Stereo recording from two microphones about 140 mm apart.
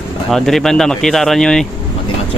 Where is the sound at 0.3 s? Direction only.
Centre (ahead or behind).